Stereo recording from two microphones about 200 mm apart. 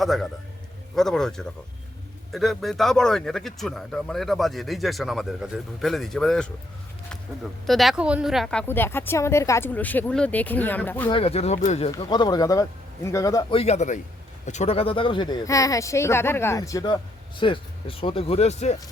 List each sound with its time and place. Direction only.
0.0 s speech: centre (ahead or behind)
7.7 s speech: centre (ahead or behind)
11.1 s speech: 30° left (ahead or behind)
11.9 s speech: 20° left (ahead or behind)
13.6 s speech: 35° left (ahead or behind)